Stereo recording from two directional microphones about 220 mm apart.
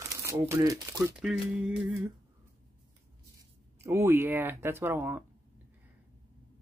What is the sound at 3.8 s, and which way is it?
Speech, 10° right (ahead or behind).